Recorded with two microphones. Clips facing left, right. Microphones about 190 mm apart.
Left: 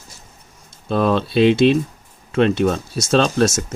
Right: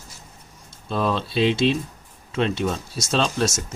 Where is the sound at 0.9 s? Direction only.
55° left (ahead or behind).